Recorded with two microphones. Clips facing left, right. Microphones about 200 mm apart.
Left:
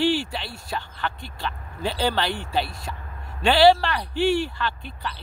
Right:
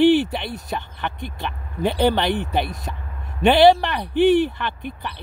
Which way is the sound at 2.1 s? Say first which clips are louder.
Right 4 dB; 20° right (ahead or behind).